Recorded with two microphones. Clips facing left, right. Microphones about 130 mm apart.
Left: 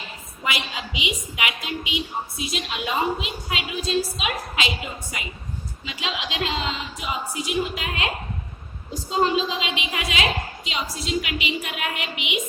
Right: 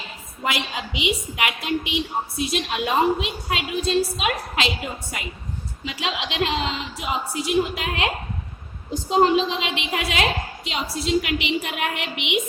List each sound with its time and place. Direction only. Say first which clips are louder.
0.4 s a woman's voice: right 3 dB; 60° right (ahead or behind)
5.8 s a woman's voice: right 3 dB; 60° right (ahead or behind)